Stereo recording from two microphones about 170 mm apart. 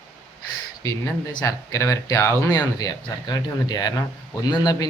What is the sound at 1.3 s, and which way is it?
Speech, 20° left (ahead or behind).